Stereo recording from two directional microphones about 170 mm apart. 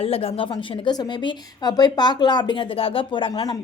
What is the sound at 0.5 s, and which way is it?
A woman's voice, 25° left (ahead or behind).